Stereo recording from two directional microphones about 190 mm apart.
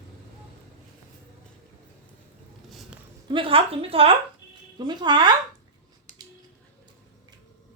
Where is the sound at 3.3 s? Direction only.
25° right (ahead or behind).